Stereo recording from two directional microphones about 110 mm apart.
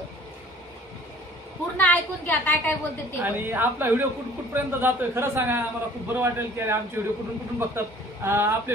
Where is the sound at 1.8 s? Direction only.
15° left (ahead or behind).